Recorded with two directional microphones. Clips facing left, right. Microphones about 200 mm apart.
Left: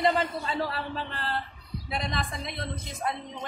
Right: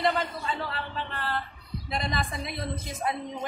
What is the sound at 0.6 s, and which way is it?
Speech, 40° left (ahead or behind).